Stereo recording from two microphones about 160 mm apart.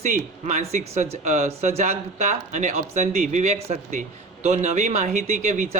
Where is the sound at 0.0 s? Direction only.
50° right (ahead or behind).